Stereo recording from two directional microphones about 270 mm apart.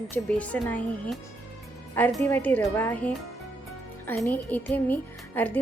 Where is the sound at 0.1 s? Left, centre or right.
Centre.